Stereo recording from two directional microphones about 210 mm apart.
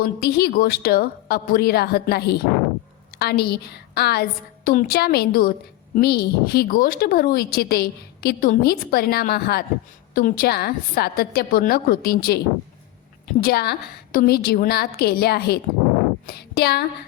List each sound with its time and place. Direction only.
0.0 s a woman's voice: 50° left (ahead or behind)
13.4 s a woman's voice: 50° left (ahead or behind)
16.2 s a sound: 50° left (ahead or behind)